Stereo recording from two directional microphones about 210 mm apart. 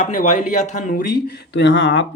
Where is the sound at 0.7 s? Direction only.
35° left (ahead or behind); by 2.0 s 60° left (ahead or behind).